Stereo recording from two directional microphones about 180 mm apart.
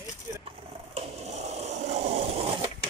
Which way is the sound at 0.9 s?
40° right (ahead or behind).